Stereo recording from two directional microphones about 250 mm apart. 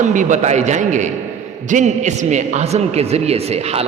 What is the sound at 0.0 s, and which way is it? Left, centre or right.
A man's voice, right.